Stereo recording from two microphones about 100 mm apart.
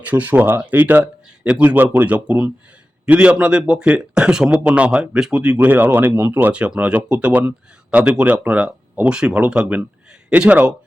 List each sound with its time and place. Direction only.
0.0 s speech: 15° right (ahead or behind)